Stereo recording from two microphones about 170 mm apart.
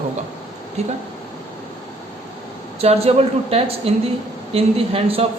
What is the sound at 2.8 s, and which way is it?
Speech, 35° right (ahead or behind).